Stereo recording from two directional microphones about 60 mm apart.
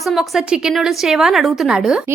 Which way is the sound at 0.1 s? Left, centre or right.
Centre.